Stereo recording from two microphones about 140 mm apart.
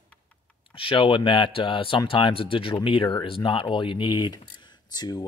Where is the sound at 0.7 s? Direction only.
40° left (ahead or behind).